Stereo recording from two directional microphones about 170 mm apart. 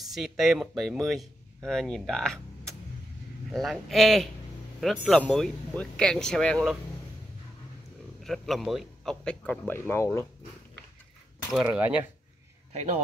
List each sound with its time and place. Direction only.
0.1 s a man's voice: centre (ahead or behind)
8.2 s a man's voice: centre (ahead or behind)
11.6 s speech: 10° right (ahead or behind)
12.7 s speech: 45° right (ahead or behind)